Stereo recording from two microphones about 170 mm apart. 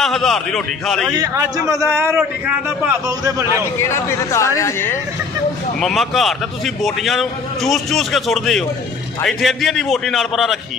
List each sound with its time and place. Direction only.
0.0 s a man's voice: centre (ahead or behind)
1.1 s a man's voice: 20° right (ahead or behind)
3.1 s a man's voice: 20° right (ahead or behind)
3.8 s speech: 15° left (ahead or behind)
5.8 s a man's voice: centre (ahead or behind)